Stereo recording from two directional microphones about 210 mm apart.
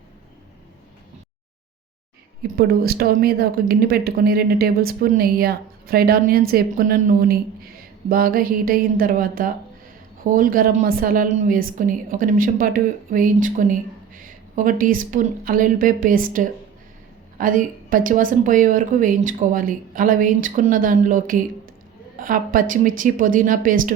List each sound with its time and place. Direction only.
2.6 s speech: 45° right (ahead or behind)